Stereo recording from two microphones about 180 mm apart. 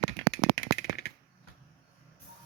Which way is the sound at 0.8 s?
60° left (ahead or behind).